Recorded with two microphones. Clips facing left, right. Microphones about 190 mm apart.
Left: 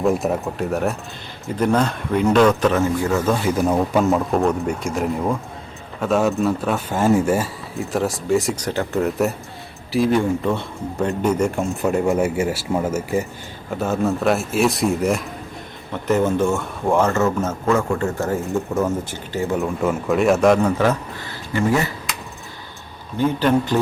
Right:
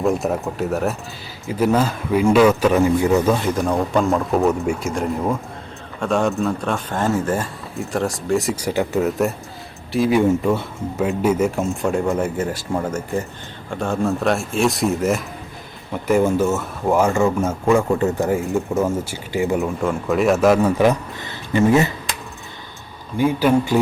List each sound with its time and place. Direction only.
0.0 s speech: centre (ahead or behind); by 3.2 s 15° right (ahead or behind)
3.4 s speech: 5° left (ahead or behind); by 8.9 s 10° right (ahead or behind)
8.9 s speech: centre (ahead or behind)
19.5 s speech: centre (ahead or behind); by 22.1 s 20° right (ahead or behind)
23.1 s speech: 10° right (ahead or behind)